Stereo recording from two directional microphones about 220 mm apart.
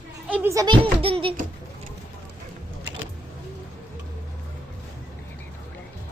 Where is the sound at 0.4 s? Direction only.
15° right (ahead or behind).